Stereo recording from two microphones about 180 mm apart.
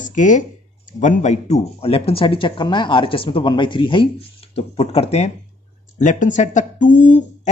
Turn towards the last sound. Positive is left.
turn(degrees=45)  # may be behind; listen again after turning